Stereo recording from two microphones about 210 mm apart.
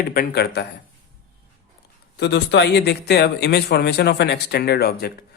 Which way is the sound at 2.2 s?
55° left (ahead or behind).